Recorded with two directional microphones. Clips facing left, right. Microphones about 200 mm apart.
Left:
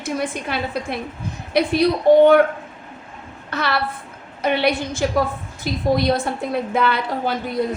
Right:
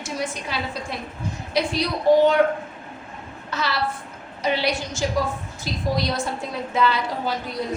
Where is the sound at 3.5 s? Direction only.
60° left (ahead or behind).